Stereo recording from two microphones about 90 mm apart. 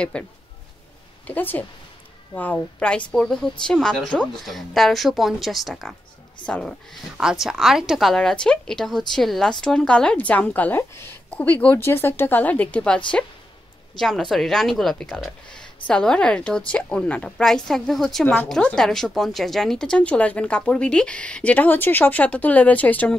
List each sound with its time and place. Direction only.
0.1 s a woman's voice: 10° left (ahead or behind)
7.2 s speech: 5° right (ahead or behind); by 13.0 s 10° left (ahead or behind)
13.9 s a woman's voice: centre (ahead or behind)
18.2 s speech: 20° left (ahead or behind)
18.6 s speech: 5° left (ahead or behind)